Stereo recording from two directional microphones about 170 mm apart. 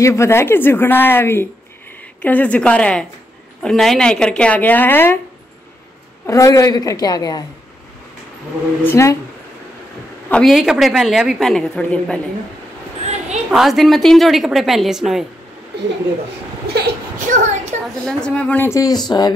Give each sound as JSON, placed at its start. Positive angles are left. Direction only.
{"t": 0.0, "sound": "speech", "side_deg": 15}
{"t": 6.2, "sound": "a woman's voice", "side_deg": 20}
{"t": 8.8, "sound": "speech", "side_deg": 15}
{"t": 10.3, "sound": "a woman's voice", "side_deg": 0}
{"t": 13.5, "sound": "a woman's voice", "side_deg": 0}
{"t": 16.6, "sound": "speech", "side_deg": -70}
{"t": 17.3, "sound": "a sound", "side_deg": -45}
{"t": 18.0, "sound": "speech", "side_deg": 5}